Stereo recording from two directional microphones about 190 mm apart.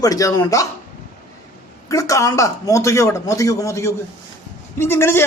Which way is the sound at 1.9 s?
15° left (ahead or behind).